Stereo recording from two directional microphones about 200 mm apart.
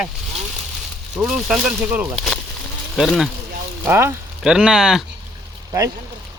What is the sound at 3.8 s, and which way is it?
Speech, 10° right (ahead or behind).